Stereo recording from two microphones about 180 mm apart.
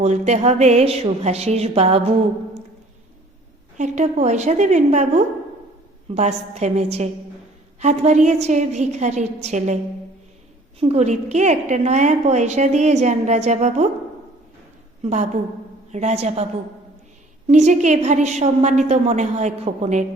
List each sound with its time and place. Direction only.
0.0 s a woman's voice: 40° right (ahead or behind)
3.8 s a woman's voice: 40° right (ahead or behind)
10.8 s a woman's voice: 35° right (ahead or behind)
15.0 s a woman's voice: 40° right (ahead or behind)
17.5 s a woman's voice: 40° right (ahead or behind)